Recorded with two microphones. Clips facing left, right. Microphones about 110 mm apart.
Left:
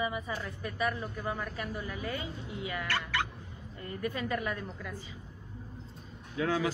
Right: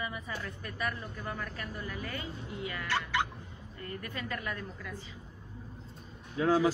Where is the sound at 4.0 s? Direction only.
15° left (ahead or behind).